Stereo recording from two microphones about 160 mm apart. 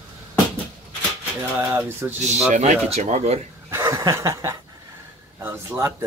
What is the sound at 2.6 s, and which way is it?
Speech, 45° right (ahead or behind).